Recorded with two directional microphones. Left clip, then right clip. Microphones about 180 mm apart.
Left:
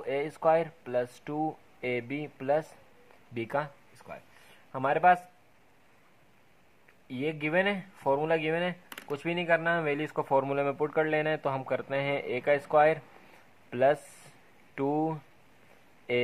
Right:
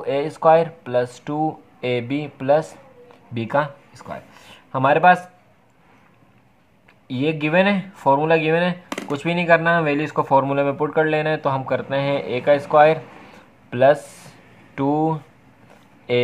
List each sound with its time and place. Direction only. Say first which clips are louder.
0.0 s speech: right 10 dB; 30° left (ahead or behind)
7.1 s speech: right 10 dB; 35° left (ahead or behind)